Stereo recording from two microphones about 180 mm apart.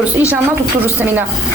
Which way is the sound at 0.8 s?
10° right (ahead or behind).